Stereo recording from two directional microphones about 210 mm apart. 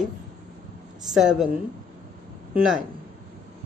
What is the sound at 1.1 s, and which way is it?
A woman's voice, centre (ahead or behind).